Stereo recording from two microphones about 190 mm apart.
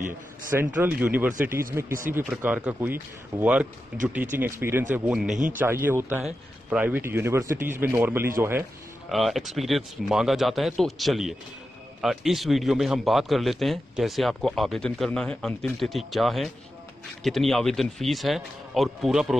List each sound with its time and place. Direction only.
0.5 s a man's voice: 10° right (ahead or behind)
5.3 s speech: 40° right (ahead or behind)
5.6 s speech: 10° right (ahead or behind)
9.1 s a man's voice: centre (ahead or behind)